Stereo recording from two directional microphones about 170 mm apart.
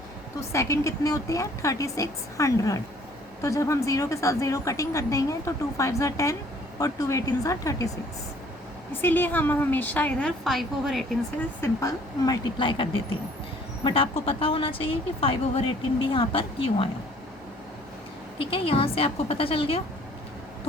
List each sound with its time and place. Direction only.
0.5 s a woman's voice: 15° left (ahead or behind)
8.9 s a woman's voice: 10° left (ahead or behind)
11.6 s a woman's voice: 20° left (ahead or behind)
18.3 s a woman's voice: 30° left (ahead or behind)